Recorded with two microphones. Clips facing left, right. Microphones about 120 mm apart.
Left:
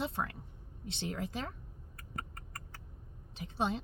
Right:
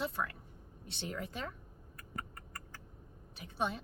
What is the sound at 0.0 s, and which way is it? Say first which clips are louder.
Speech: left 1 dB; 25° left (ahead or behind).